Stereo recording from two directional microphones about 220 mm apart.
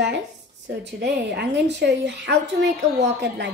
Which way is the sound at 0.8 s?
50° right (ahead or behind).